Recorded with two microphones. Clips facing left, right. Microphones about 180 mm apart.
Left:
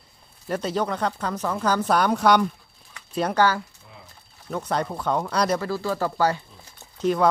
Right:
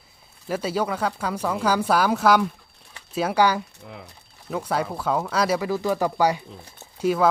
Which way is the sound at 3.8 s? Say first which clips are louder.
Right 8 dB; 80° right.